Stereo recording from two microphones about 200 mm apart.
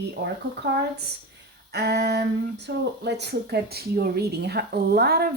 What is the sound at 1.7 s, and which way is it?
Speech, 55° right (ahead or behind).